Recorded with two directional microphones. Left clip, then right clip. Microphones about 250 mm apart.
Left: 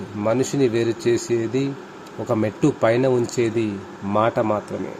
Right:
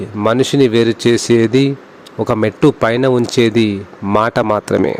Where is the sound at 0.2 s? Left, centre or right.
Right.